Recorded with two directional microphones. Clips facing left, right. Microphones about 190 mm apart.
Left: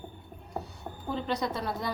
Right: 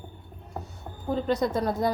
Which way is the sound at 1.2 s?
45° right (ahead or behind).